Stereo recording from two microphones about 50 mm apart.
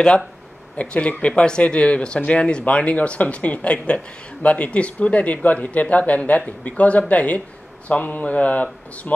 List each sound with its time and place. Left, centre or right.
0.7 s speech: left